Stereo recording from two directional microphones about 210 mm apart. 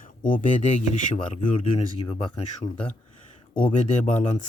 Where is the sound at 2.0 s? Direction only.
20° left (ahead or behind).